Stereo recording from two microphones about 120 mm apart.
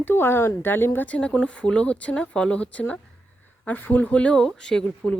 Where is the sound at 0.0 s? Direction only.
20° left (ahead or behind).